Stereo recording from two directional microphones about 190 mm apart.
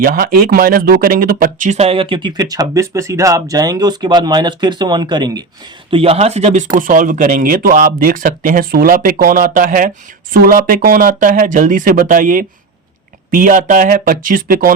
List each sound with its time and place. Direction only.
0.0 s speech: 50° right (ahead or behind)